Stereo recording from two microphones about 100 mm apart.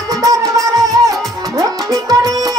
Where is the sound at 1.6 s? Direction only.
35° right (ahead or behind).